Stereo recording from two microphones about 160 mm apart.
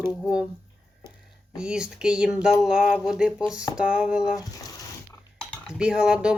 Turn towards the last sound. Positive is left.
turn(degrees=-5)  # may be behind; listen again after turning